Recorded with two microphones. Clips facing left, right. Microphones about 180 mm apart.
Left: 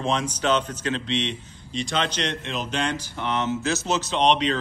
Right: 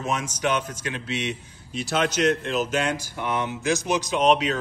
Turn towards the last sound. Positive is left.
turn(degrees=-5)  # may be behind; listen again after turning